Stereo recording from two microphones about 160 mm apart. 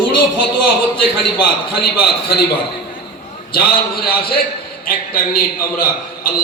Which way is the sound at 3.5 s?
70° left (ahead or behind).